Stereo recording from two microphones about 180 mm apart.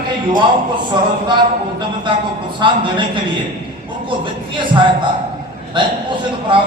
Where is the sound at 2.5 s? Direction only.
25° right (ahead or behind).